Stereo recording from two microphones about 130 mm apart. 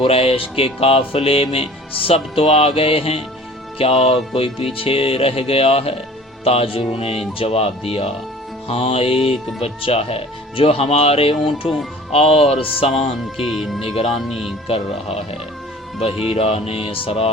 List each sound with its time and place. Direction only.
0.0 s music: 50° left (ahead or behind)
13.3 s speech: 5° right (ahead or behind)
13.9 s music: 55° left (ahead or behind)
14.2 s speech: centre (ahead or behind)
14.7 s music: 50° left (ahead or behind)